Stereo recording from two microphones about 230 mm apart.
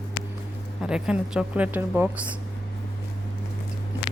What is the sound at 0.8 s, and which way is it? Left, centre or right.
Speech, centre.